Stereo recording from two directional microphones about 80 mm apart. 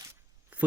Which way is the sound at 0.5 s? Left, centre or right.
Centre.